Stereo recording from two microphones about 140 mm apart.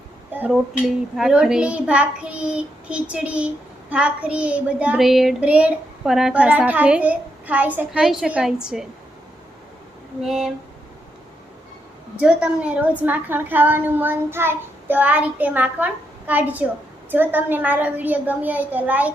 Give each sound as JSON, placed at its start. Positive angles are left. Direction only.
{"t": 0.3, "sound": "a child's voice", "side_deg": -10}
{"t": 10.2, "sound": "speech", "side_deg": -5}
{"t": 12.2, "sound": "a child's voice", "side_deg": -10}